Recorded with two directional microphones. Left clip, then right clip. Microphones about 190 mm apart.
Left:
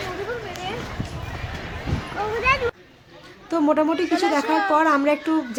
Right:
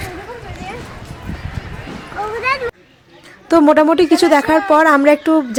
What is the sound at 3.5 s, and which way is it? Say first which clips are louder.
A man's voice: right 10 dB; 45° right (ahead or behind).